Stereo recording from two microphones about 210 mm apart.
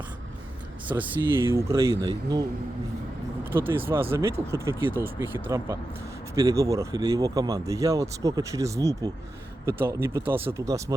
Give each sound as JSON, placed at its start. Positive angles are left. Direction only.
{"t": 0.9, "sound": "speech", "side_deg": -10}
{"t": 3.8, "sound": "speech", "side_deg": -10}